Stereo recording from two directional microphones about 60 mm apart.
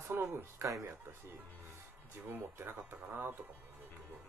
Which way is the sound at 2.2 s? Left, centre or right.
Right.